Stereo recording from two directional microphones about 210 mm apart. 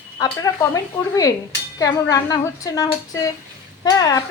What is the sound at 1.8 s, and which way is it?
Speech, 15° left (ahead or behind).